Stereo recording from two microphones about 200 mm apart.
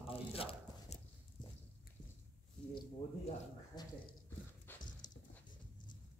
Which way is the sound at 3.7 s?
20° left (ahead or behind).